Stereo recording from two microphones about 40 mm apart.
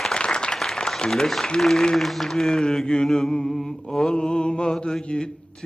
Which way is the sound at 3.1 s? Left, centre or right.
Centre.